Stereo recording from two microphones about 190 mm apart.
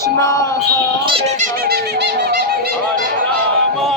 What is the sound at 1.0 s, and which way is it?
Synthetic singing, 30° right (ahead or behind).